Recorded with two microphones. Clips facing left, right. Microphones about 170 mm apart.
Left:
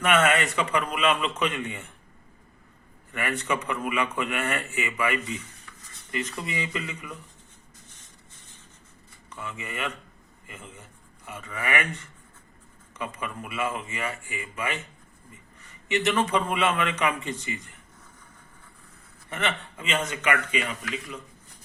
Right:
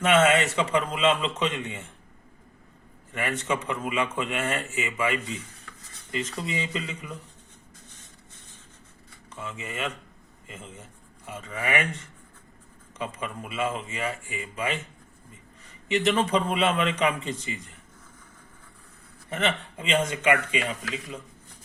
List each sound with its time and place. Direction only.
0.1 s a man's voice: 25° right (ahead or behind)
3.2 s a man's voice: 20° right (ahead or behind)
9.3 s a man's voice: 25° right (ahead or behind)
13.0 s a man's voice: 30° right (ahead or behind)
15.9 s a man's voice: 30° right (ahead or behind)
19.3 s a man's voice: 30° right (ahead or behind)